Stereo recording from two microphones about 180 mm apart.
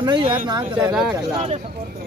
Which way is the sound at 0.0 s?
25° right (ahead or behind).